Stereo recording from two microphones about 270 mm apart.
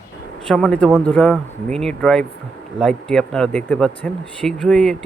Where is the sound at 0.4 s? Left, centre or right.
Centre.